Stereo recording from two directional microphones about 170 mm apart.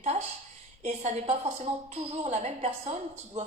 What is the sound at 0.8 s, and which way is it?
A woman's voice, 40° right (ahead or behind).